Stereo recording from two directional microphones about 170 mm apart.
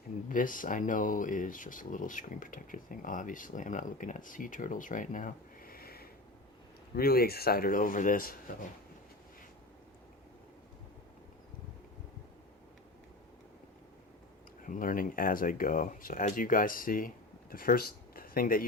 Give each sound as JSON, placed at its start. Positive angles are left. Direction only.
{"t": 0.3, "sound": "speech", "side_deg": 50}
{"t": 14.7, "sound": "speech", "side_deg": 55}